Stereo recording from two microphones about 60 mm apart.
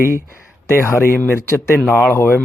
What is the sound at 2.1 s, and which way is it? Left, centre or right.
Speech, left.